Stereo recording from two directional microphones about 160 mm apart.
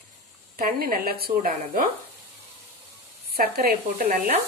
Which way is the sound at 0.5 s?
65° right (ahead or behind).